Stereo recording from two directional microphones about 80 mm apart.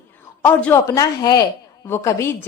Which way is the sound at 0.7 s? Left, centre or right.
Left.